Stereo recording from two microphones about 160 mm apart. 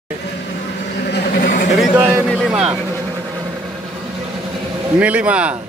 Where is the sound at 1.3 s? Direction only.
55° left (ahead or behind).